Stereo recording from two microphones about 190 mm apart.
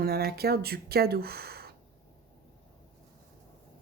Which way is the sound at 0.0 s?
55° right (ahead or behind).